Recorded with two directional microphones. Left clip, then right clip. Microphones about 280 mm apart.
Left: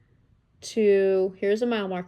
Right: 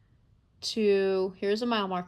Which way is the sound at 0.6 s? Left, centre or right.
Centre.